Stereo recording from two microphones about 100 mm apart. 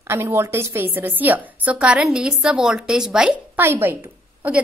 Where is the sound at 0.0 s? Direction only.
25° right (ahead or behind); by 3.3 s 5° right (ahead or behind).